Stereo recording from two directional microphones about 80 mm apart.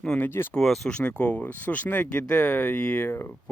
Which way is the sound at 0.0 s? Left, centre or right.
Centre.